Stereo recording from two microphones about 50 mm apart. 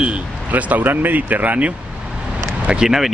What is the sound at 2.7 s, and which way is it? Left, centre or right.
Speech, centre.